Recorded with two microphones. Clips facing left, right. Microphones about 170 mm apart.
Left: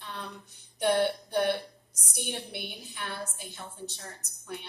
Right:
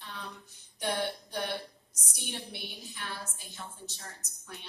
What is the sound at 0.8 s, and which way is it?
A man's voice, 55° left (ahead or behind).